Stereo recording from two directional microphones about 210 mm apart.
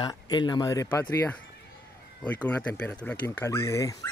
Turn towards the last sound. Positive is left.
turn(degrees=15)  # may be behind; listen again after turning